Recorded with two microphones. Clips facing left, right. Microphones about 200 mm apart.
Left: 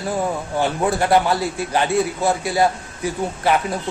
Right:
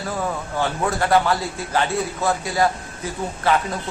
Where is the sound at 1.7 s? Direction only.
15° left (ahead or behind).